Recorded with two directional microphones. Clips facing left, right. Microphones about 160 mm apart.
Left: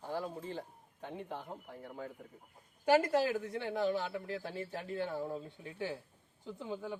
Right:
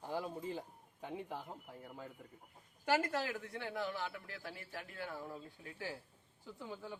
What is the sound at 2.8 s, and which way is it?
A man's voice, 15° left (ahead or behind).